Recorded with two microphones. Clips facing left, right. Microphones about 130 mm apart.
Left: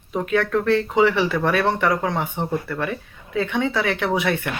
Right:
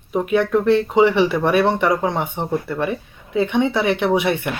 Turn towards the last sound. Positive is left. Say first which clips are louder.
# right 4 dB
turn(degrees=-20)  # may be behind; listen again after turning